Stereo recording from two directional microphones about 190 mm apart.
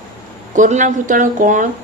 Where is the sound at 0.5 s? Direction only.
40° right (ahead or behind).